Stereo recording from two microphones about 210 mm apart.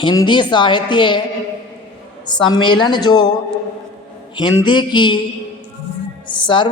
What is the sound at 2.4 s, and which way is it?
Speech, 20° left (ahead or behind).